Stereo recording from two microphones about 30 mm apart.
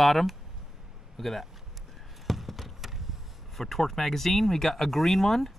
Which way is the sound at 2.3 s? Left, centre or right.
Centre.